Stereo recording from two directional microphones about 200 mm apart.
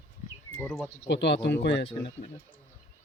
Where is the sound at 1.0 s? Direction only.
60° left (ahead or behind).